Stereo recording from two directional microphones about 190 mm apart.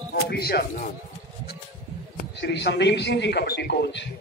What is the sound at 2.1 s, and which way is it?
A man's voice, 65° left (ahead or behind).